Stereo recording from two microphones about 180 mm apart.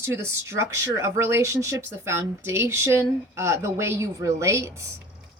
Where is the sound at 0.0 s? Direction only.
15° right (ahead or behind).